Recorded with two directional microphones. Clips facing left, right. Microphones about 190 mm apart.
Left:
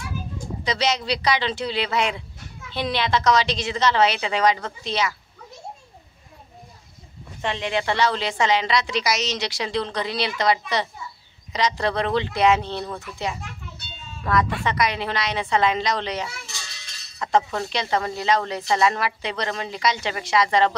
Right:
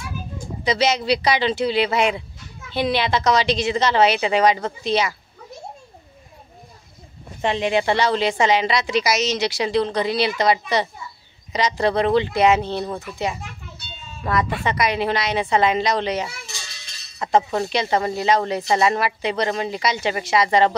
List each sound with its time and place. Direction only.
0.7 s a woman's voice: 5° right (ahead or behind)
7.4 s a woman's voice: 15° right (ahead or behind)
12.8 s speech: 20° right (ahead or behind)
14.3 s a woman's voice: 10° right (ahead or behind)
17.4 s a woman's voice: 20° right (ahead or behind)